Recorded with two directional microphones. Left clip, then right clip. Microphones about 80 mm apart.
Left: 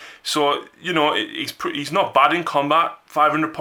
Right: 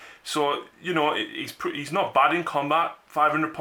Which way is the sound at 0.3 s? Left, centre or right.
Left.